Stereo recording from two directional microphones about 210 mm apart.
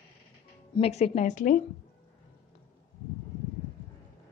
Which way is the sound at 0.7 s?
30° left (ahead or behind).